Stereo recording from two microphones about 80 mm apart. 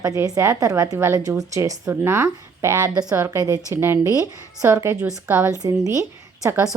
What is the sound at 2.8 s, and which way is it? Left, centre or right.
Speech, right.